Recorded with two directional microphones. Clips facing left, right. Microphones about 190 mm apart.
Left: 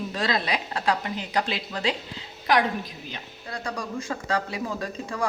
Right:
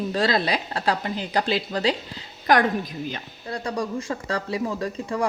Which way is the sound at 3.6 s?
35° right (ahead or behind).